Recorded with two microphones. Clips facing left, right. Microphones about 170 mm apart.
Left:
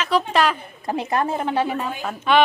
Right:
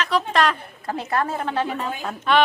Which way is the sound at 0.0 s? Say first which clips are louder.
Left 1 dB; 5° left (ahead or behind).